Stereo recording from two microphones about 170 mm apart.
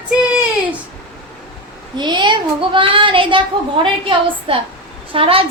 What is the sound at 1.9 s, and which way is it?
A woman's voice, 25° right (ahead or behind).